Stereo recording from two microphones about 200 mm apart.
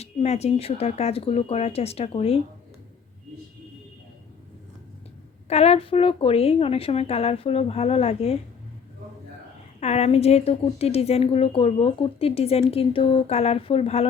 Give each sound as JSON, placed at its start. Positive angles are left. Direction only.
{"t": 0.0, "sound": "a woman's voice", "side_deg": 30}
{"t": 5.5, "sound": "a woman's voice", "side_deg": 30}
{"t": 9.8, "sound": "a woman's voice", "side_deg": 30}